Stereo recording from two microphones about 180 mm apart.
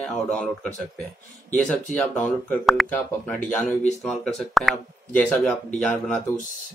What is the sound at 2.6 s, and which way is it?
Speech, centre (ahead or behind).